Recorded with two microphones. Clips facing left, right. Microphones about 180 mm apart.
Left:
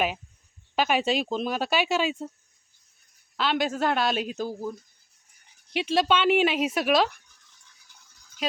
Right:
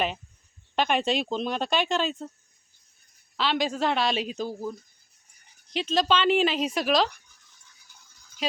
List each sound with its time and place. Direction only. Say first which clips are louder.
0.8 s speech: left 1 dB; 5° left (ahead or behind)
3.3 s speech: left 1 dB; centre (ahead or behind)
5.7 s speech: left 1 dB; 5° left (ahead or behind)
8.4 s speech: even; centre (ahead or behind)